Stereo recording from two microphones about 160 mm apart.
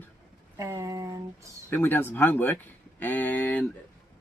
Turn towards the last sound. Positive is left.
turn(degrees=10)  # may be behind; listen again after turning